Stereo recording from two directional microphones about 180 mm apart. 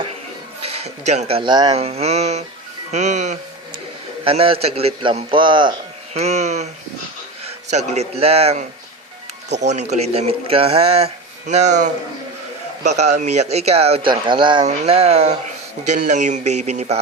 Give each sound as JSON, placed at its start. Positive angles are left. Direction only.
{"t": 0.6, "sound": "speech", "side_deg": -35}
{"t": 1.8, "sound": "speech", "side_deg": -35}
{"t": 4.2, "sound": "speech", "side_deg": -30}
{"t": 6.1, "sound": "speech", "side_deg": -35}
{"t": 9.5, "sound": "speech", "side_deg": -70}
{"t": 9.9, "sound": "speech", "side_deg": -35}
{"t": 12.8, "sound": "speech", "side_deg": -40}